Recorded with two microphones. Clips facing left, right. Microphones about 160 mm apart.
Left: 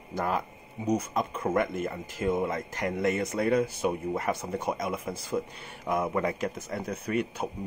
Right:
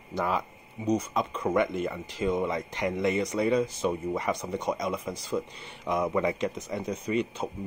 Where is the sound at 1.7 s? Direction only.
45° left (ahead or behind).